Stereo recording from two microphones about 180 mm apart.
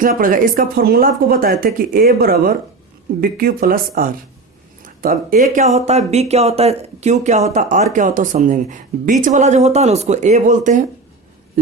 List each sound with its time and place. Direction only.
0.0 s speech: 50° right (ahead or behind)